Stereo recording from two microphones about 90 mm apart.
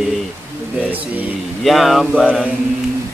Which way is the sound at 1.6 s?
Centre (ahead or behind).